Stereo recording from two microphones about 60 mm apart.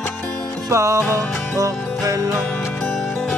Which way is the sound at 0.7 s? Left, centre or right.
Right.